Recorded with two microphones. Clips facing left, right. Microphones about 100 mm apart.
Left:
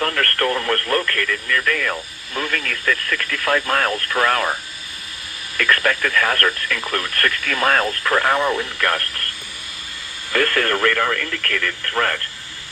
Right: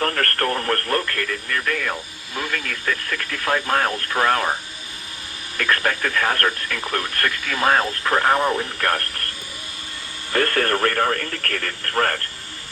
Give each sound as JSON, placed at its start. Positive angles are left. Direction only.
{"t": 0.0, "sound": "speech", "side_deg": -35}
{"t": 5.5, "sound": "speech", "side_deg": -30}
{"t": 10.3, "sound": "speech", "side_deg": -35}